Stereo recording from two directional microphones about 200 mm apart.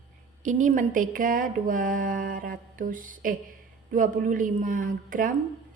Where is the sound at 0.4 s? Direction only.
40° right (ahead or behind).